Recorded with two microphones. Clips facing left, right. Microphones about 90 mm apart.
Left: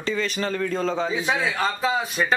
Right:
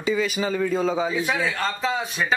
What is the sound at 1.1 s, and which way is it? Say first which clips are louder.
Speech: even; 20° left (ahead or behind).